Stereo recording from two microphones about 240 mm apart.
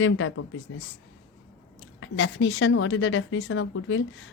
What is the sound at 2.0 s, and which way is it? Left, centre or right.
A woman's voice, left.